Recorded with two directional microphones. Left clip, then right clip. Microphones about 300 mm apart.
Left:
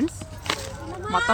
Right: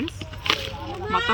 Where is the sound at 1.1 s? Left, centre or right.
Centre.